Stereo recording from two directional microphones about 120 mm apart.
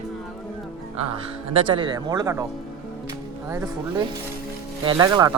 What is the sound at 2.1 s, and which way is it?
Speech, 30° right (ahead or behind).